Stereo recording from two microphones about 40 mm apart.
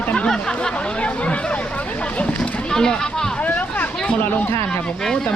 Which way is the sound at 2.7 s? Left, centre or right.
Centre.